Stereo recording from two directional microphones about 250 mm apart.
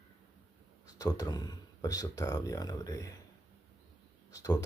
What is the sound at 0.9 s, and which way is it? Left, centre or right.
Speech, centre.